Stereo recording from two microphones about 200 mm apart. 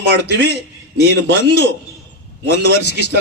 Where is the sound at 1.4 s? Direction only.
55° left (ahead or behind).